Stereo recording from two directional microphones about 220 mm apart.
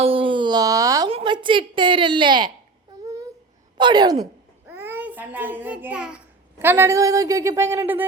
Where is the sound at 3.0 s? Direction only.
15° right (ahead or behind).